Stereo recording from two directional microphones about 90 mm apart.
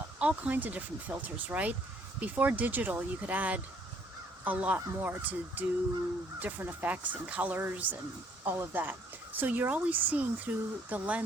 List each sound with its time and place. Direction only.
0.2 s speech: 15° right (ahead or behind)